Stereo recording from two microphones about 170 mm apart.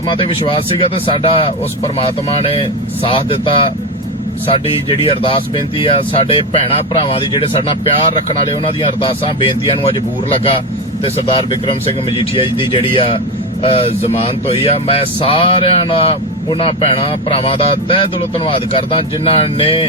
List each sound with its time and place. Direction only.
0.1 s speech: 35° left (ahead or behind)
8.6 s speech: 30° left (ahead or behind)
11.0 s speech: 30° left (ahead or behind)